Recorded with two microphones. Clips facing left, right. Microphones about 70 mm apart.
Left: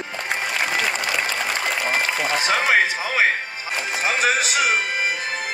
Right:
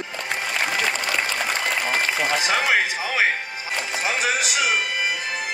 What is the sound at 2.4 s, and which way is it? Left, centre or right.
Music, left.